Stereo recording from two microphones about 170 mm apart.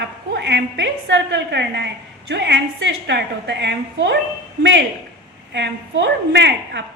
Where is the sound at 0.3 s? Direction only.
90° right.